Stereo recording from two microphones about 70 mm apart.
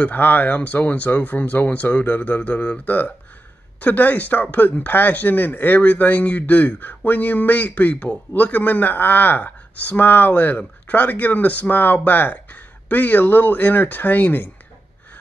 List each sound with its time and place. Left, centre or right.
0.0 s speech: left